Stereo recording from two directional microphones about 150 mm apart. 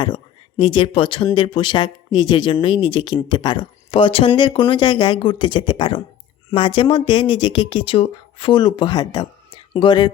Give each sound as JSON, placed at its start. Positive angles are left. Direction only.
{"t": 0.0, "sound": "speech", "side_deg": 30}